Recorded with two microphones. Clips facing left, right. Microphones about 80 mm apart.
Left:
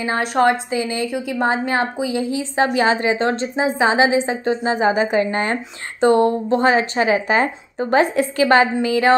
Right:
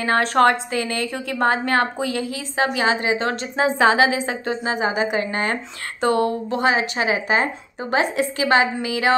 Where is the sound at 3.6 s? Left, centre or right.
Centre.